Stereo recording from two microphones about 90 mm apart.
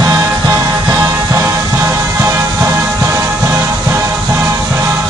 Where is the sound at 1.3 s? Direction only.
30° right (ahead or behind).